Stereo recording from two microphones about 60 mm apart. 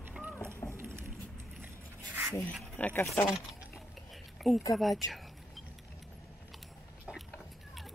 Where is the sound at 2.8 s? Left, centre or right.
Left.